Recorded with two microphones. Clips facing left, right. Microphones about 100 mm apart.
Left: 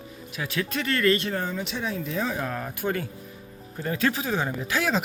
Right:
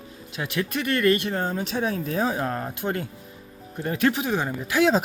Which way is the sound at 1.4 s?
45° right (ahead or behind).